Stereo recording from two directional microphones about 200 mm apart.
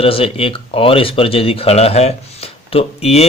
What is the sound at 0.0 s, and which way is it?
Speech, 30° left (ahead or behind).